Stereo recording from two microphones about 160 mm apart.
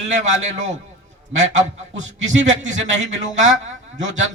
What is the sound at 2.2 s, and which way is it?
A man's voice, 50° right (ahead or behind).